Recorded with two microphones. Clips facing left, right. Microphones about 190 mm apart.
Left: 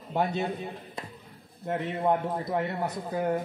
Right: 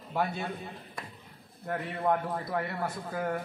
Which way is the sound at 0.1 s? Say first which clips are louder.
Left 4 dB; 20° left (ahead or behind).